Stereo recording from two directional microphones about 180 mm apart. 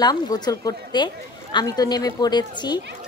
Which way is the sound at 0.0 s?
20° left (ahead or behind).